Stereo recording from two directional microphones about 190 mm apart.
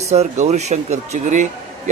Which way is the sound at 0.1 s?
35° right (ahead or behind).